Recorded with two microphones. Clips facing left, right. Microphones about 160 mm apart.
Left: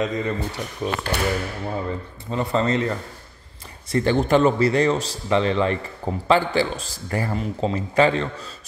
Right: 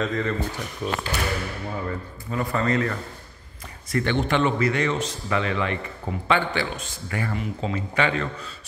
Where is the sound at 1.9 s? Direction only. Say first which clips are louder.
Left 2 dB; 25° left (ahead or behind).